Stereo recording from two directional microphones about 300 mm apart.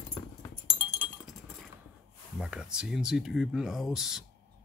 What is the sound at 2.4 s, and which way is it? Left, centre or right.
Speech, centre.